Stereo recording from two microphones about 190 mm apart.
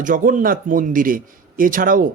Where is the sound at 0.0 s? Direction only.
45° right (ahead or behind).